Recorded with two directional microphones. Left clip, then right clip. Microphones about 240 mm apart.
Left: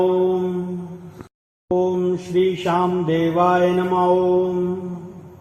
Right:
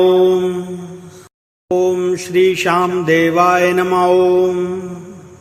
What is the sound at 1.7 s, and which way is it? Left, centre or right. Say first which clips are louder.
Mantra: right 5 dB; right.